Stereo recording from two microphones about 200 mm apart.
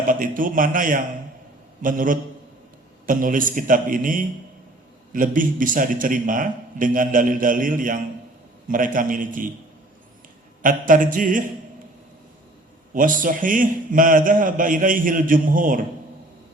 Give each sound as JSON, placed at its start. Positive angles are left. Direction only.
{"t": 0.1, "sound": "a man's voice", "side_deg": -40}
{"t": 10.6, "sound": "a man's voice", "side_deg": -40}
{"t": 12.9, "sound": "a man's voice", "side_deg": -40}